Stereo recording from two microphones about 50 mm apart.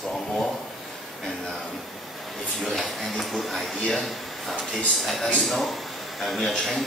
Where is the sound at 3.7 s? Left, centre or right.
Centre.